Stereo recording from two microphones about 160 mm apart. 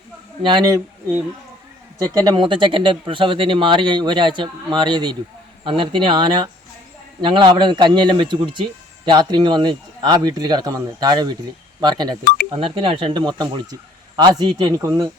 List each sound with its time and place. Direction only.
0.4 s a man's voice: 30° right (ahead or behind)
2.2 s a man's voice: 30° right (ahead or behind)